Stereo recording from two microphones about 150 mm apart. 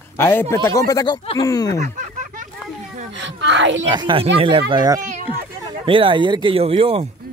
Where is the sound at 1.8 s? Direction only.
55° right (ahead or behind).